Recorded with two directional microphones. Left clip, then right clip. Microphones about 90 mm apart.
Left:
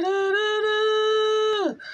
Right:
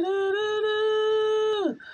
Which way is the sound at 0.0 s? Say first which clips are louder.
Left 3 dB; 25° right (ahead or behind).